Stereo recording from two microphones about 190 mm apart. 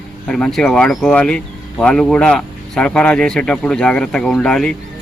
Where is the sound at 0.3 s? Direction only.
5° left (ahead or behind).